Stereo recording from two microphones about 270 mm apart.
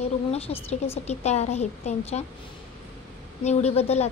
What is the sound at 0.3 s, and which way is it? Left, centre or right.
A woman's voice, left.